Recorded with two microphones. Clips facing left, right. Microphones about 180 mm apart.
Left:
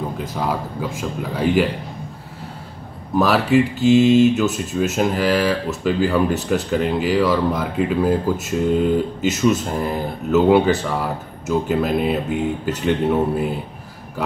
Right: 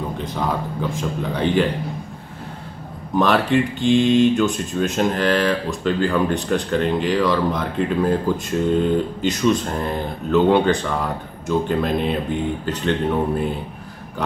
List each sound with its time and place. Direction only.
0.2 s speech: 5° left (ahead or behind)
3.2 s speech: 5° left (ahead or behind)